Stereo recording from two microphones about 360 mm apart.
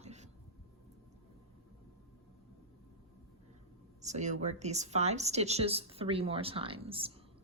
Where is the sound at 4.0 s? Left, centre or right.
Centre.